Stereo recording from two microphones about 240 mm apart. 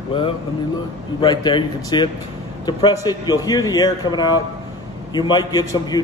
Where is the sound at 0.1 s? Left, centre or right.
Centre.